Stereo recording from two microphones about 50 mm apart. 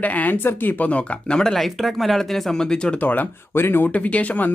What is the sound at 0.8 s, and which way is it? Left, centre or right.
Speech, left.